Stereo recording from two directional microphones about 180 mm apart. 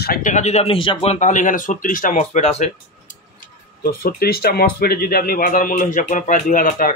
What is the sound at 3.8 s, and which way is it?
A man's voice, 55° left (ahead or behind).